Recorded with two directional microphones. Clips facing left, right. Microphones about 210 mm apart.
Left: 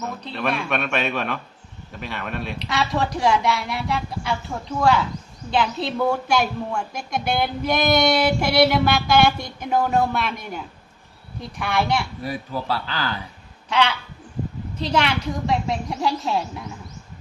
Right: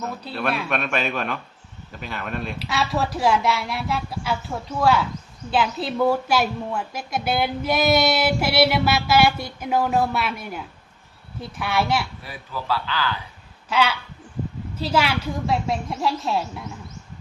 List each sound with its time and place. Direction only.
0.0 s a woman's voice: 5° right (ahead or behind)
12.2 s speech: 40° left (ahead or behind)
13.7 s a woman's voice: 5° right (ahead or behind)